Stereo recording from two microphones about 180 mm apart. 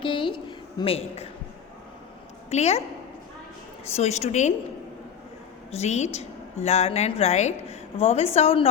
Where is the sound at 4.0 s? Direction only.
35° left (ahead or behind).